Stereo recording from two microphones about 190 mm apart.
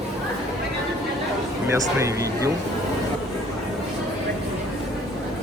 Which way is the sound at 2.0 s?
15° right (ahead or behind).